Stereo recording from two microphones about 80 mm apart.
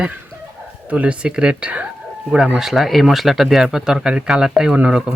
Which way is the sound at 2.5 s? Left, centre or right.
Centre.